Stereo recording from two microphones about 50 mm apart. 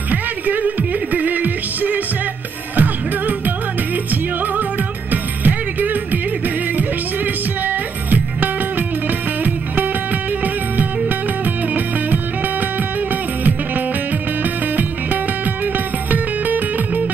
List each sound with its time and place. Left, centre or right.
0.1 s music: right
7.6 s music: right
10.4 s music: right